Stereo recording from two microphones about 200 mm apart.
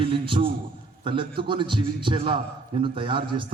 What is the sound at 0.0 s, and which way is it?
A man's voice, 25° right (ahead or behind).